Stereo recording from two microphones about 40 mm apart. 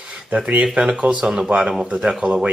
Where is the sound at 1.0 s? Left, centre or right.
Centre.